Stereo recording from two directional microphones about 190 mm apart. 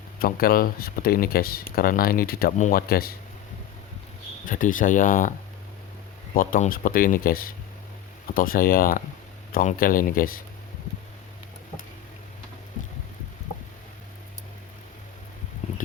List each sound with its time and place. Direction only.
0.2 s speech: 50° left (ahead or behind)
4.4 s speech: 45° left (ahead or behind)
6.3 s speech: 45° left (ahead or behind)